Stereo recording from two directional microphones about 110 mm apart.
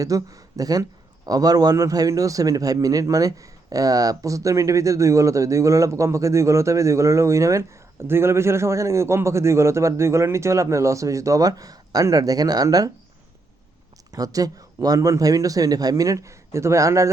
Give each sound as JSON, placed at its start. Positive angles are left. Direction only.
{"t": 0.0, "sound": "speech", "side_deg": -30}
{"t": 14.1, "sound": "speech", "side_deg": -35}